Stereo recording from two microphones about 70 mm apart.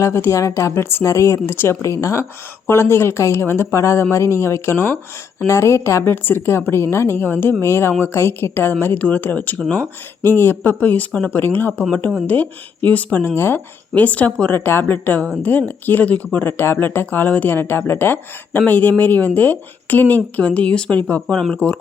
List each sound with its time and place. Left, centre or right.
0.0 s a woman's voice: left
1.0 s speech: left
1.5 s a woman's voice: left
1.8 s speech: left
2.6 s a woman's voice: left
13.9 s speech: left
14.5 s speech: left; by 21.8 s centre